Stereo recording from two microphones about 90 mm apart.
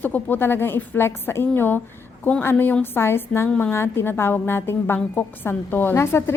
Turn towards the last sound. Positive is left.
turn(degrees=30)  # may be behind; listen again after turning